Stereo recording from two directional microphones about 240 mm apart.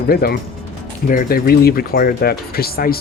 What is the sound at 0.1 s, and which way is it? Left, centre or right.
Speech, left.